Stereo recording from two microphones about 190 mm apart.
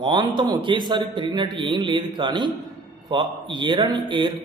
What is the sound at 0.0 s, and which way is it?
Speech, 25° right (ahead or behind).